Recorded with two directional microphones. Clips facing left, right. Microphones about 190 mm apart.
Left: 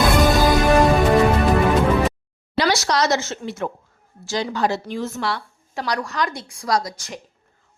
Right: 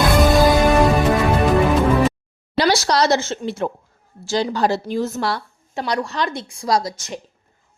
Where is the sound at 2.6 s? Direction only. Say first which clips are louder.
Right 3 dB; 30° right (ahead or behind).